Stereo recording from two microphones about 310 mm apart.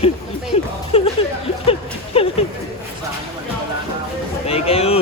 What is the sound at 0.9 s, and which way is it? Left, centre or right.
Speech, centre.